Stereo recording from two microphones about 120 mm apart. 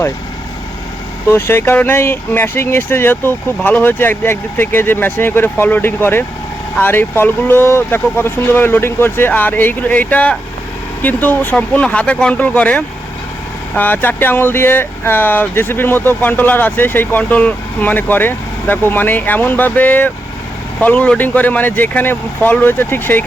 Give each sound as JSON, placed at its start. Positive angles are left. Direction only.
{"t": 1.3, "sound": "speech", "side_deg": 20}